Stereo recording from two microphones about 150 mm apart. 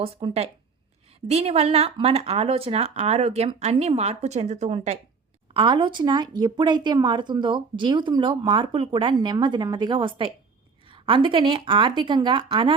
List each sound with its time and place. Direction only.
0.0 s speech: 40° right (ahead or behind)
5.5 s a woman's voice: 30° right (ahead or behind)